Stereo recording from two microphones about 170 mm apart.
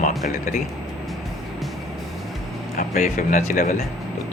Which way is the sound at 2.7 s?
55° left (ahead or behind).